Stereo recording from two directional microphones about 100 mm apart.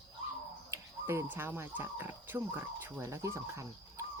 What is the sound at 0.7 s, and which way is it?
Speech, 25° right (ahead or behind).